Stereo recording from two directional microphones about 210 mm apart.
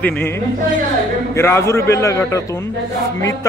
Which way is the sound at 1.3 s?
10° left (ahead or behind).